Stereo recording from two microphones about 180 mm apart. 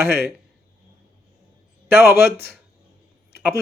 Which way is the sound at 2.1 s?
60° left (ahead or behind).